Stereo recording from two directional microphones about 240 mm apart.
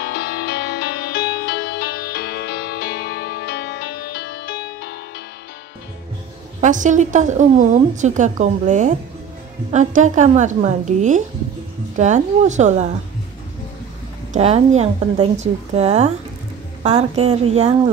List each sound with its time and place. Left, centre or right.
0.0 s music: left
6.6 s a woman's voice: right
14.3 s a woman's voice: right